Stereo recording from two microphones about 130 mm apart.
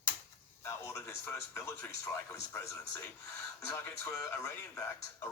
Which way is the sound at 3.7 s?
20° left (ahead or behind).